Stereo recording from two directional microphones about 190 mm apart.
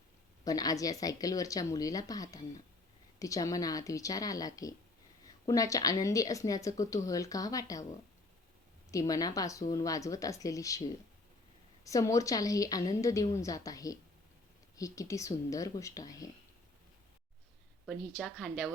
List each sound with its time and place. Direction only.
0.4 s a woman's voice: 20° left (ahead or behind)
8.9 s a woman's voice: 15° left (ahead or behind)
18.2 s a woman's voice: centre (ahead or behind)